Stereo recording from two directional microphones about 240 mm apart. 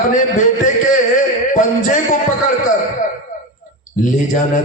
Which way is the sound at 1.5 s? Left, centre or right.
Left.